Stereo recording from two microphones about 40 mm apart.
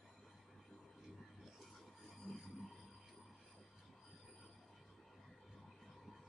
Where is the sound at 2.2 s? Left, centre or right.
Centre.